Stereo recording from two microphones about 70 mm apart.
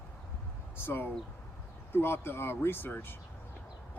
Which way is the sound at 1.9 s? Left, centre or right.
Left.